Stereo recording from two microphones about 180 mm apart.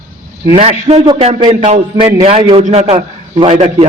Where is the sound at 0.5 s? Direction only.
35° right (ahead or behind).